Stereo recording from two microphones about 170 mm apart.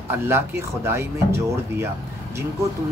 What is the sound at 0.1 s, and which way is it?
Speech, 15° right (ahead or behind).